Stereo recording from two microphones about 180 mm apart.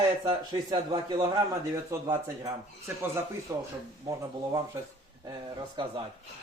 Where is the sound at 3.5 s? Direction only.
15° right (ahead or behind).